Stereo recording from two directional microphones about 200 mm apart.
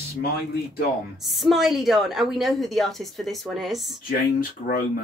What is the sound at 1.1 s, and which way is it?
A woman's voice, centre (ahead or behind).